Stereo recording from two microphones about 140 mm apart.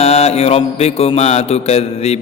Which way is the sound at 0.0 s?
50° left (ahead or behind).